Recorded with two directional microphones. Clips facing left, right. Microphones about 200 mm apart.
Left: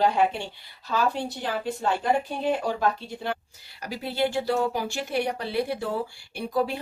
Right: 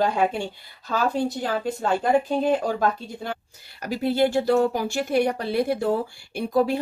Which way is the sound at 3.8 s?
50° right (ahead or behind).